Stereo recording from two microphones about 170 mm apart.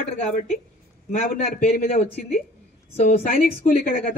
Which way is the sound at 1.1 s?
45° left (ahead or behind).